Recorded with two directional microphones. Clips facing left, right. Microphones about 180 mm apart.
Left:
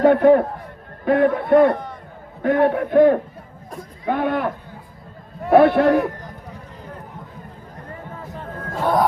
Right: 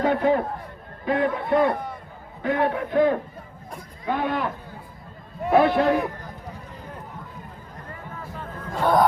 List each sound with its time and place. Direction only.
0.0 s a man's voice: 55° left (ahead or behind)
1.7 s a sound: 10° right (ahead or behind)
2.4 s a man's voice: 50° left (ahead or behind)
8.3 s chatter: 45° left (ahead or behind)
8.7 s speech: centre (ahead or behind)